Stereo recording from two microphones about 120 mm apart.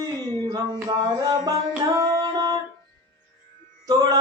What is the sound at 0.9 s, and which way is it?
Music, 30° right (ahead or behind).